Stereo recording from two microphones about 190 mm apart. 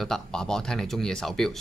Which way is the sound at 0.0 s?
5° left (ahead or behind).